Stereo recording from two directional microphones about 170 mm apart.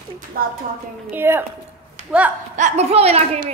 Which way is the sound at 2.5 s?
40° right (ahead or behind).